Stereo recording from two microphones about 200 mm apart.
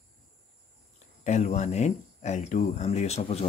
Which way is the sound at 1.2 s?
35° left (ahead or behind).